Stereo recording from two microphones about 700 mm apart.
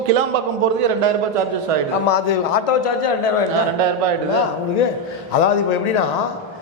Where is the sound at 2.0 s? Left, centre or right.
Left.